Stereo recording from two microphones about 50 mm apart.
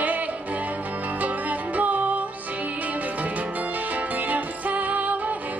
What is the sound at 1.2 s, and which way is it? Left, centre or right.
Music, right.